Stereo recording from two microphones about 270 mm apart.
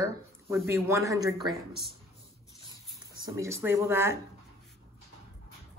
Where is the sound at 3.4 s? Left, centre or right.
Centre.